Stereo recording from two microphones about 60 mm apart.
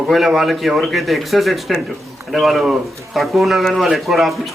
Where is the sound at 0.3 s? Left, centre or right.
Centre.